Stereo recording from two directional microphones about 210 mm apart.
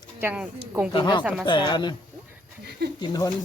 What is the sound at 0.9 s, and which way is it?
Speech, 20° left (ahead or behind).